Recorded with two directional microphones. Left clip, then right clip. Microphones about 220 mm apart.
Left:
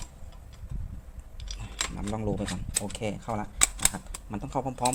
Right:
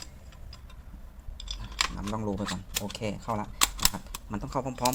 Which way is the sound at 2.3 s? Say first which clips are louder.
Even; 5° right (ahead or behind).